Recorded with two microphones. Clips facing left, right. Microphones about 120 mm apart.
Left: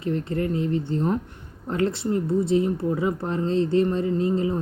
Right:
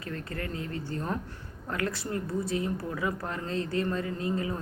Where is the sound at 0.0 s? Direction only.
25° left (ahead or behind).